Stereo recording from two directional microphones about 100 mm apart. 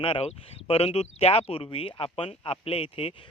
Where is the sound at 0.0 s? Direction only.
70° left (ahead or behind).